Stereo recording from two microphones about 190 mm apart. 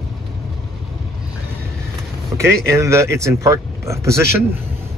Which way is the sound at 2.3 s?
15° right (ahead or behind).